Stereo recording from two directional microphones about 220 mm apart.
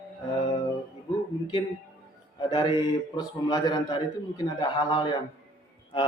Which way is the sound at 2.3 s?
20° left (ahead or behind).